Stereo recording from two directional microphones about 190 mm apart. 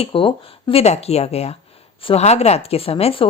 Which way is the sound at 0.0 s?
30° left (ahead or behind).